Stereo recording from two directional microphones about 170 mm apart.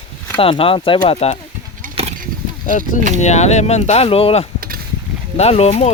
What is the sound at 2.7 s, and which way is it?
Speech, 50° left (ahead or behind).